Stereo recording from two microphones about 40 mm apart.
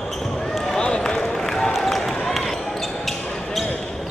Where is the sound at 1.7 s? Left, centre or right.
Centre.